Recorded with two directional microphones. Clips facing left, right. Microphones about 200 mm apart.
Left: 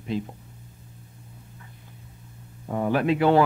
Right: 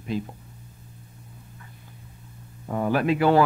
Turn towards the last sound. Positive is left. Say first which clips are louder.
# even
turn(degrees=25)  # may be behind; listen again after turning